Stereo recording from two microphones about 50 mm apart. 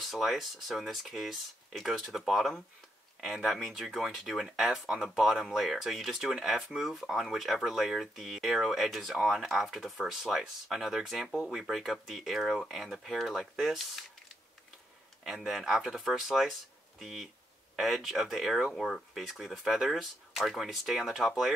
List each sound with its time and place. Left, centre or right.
0.0 s speech: centre
15.2 s speech: centre